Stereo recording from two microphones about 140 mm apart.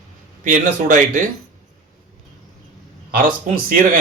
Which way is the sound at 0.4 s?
70° right (ahead or behind).